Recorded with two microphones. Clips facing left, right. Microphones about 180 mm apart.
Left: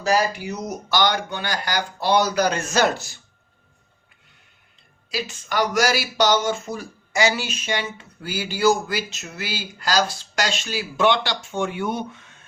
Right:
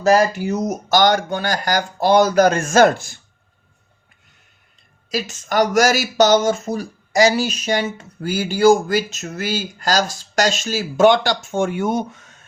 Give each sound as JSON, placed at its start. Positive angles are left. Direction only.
{"t": 0.0, "sound": "speech", "side_deg": -45}
{"t": 5.1, "sound": "speech", "side_deg": -45}